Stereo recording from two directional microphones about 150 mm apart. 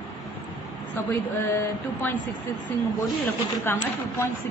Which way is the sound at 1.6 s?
15° left (ahead or behind).